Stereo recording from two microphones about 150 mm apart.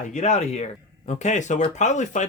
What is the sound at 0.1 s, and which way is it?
Speech, 50° left (ahead or behind).